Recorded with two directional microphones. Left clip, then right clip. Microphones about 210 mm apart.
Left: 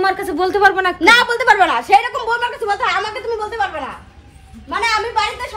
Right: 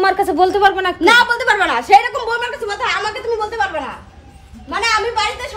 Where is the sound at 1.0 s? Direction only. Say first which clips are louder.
Even; 30° left (ahead or behind).